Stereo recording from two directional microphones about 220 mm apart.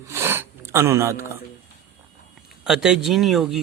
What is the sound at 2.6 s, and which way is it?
Speech, centre (ahead or behind).